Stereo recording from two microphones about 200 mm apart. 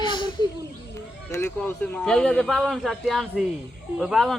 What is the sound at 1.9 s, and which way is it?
Speech, 5° left (ahead or behind).